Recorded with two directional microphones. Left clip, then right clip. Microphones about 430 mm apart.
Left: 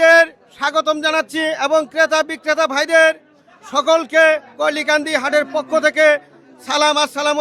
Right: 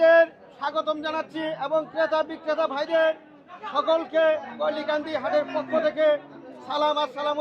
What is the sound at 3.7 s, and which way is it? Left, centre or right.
A man's voice, left.